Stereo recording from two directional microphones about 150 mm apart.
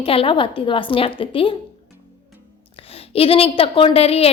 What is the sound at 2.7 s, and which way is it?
A woman's voice, 40° left (ahead or behind).